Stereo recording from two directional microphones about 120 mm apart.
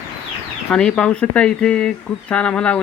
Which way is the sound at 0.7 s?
5° left (ahead or behind).